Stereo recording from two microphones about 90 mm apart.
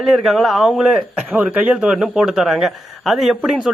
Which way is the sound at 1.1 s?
15° right (ahead or behind).